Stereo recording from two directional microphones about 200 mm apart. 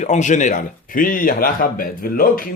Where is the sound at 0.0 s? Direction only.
35° left (ahead or behind).